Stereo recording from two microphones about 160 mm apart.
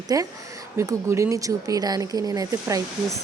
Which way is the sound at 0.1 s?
20° right (ahead or behind).